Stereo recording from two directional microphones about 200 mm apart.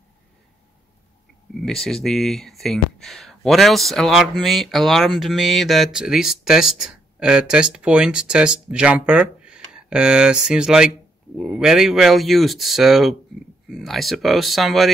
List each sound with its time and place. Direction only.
1.6 s speech: centre (ahead or behind)